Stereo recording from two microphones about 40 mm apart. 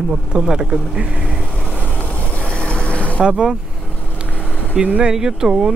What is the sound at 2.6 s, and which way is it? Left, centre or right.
Vehicle, left.